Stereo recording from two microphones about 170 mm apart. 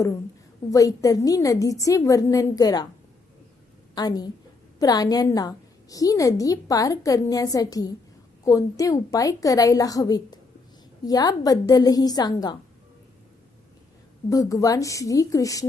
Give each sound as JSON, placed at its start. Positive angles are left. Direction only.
{"t": 0.7, "sound": "a woman's voice", "side_deg": 20}
{"t": 3.9, "sound": "a woman's voice", "side_deg": 25}
{"t": 14.3, "sound": "a woman's voice", "side_deg": 20}